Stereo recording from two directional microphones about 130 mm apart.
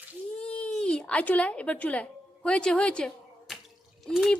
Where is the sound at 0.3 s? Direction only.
10° left (ahead or behind).